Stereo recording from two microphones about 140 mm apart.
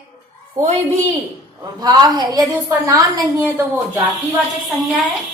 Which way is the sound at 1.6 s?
30° right (ahead or behind).